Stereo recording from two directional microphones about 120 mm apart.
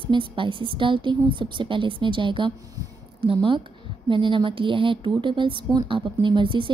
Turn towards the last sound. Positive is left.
turn(degrees=-45)  # may be behind; listen again after turning